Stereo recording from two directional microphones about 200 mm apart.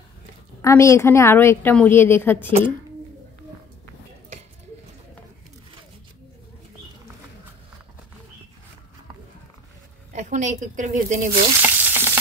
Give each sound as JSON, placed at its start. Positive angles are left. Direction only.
{"t": 0.6, "sound": "a woman's voice", "side_deg": 15}
{"t": 10.1, "sound": "speech", "side_deg": -35}
{"t": 11.6, "sound": "frying", "side_deg": -10}